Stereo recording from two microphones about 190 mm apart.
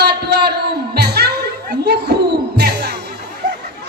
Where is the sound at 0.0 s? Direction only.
60° right (ahead or behind).